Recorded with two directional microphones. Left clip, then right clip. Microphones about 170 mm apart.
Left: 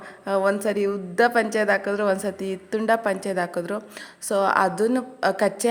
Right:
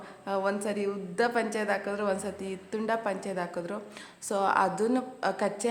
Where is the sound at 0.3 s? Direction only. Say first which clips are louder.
Left 8 dB; 30° left (ahead or behind).